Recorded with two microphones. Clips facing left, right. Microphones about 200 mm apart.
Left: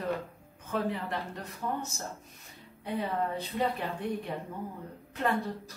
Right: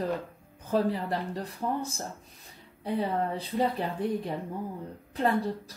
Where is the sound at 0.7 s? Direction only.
35° right (ahead or behind).